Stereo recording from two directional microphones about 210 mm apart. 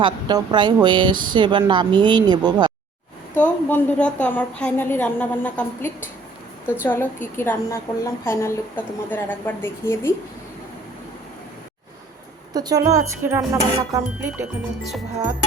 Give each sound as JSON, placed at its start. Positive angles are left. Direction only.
{"t": 0.0, "sound": "speech", "side_deg": -20}
{"t": 3.3, "sound": "a woman's voice", "side_deg": 5}
{"t": 12.5, "sound": "speech", "side_deg": -15}